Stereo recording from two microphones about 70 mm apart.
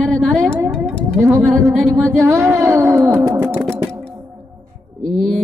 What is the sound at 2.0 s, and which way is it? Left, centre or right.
Speech, centre.